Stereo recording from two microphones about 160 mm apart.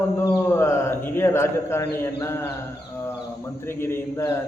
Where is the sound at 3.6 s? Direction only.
15° left (ahead or behind).